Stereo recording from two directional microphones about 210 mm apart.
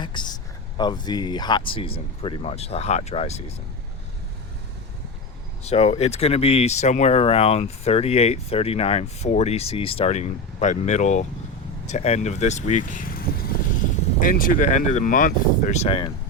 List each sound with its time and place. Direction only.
0.0 s a sound: 20° left (ahead or behind)
0.8 s speech: 20° left (ahead or behind)
5.6 s speech: 30° left (ahead or behind)